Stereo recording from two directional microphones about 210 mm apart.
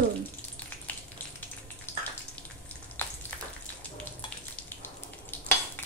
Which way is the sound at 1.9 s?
10° left (ahead or behind).